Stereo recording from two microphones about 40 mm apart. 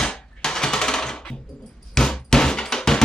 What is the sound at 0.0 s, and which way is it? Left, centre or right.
Typewriter, centre.